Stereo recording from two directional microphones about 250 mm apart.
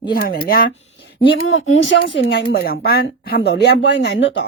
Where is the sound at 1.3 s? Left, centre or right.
Left.